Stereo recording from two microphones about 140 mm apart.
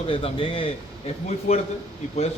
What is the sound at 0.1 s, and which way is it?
A man's voice, 40° left (ahead or behind).